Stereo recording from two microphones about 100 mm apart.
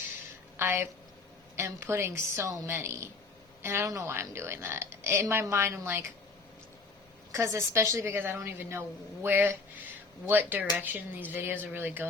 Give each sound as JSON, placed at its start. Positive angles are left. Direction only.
{"t": 0.5, "sound": "a woman's voice", "side_deg": -25}
{"t": 7.3, "sound": "a woman's voice", "side_deg": -30}
{"t": 8.1, "sound": "a woman's voice", "side_deg": -20}